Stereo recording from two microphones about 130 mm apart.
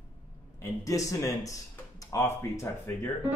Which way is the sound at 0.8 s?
25° left (ahead or behind).